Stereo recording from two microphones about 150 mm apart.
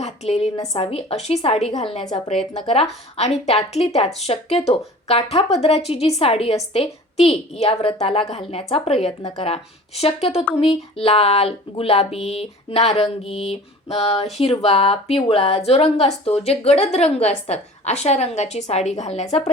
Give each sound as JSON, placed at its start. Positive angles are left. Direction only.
{"t": 0.0, "sound": "a sound", "side_deg": 45}
{"t": 0.5, "sound": "a woman's voice", "side_deg": 25}
{"t": 0.8, "sound": "a woman's voice", "side_deg": 40}
{"t": 3.2, "sound": "a woman's voice", "side_deg": 45}